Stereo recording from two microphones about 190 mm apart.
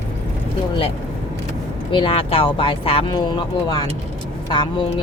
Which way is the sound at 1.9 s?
25° left (ahead or behind).